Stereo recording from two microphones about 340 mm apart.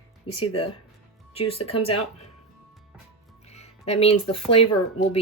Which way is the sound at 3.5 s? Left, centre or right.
Centre.